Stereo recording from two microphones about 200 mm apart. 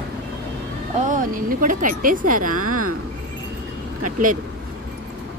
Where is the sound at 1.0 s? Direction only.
40° right (ahead or behind).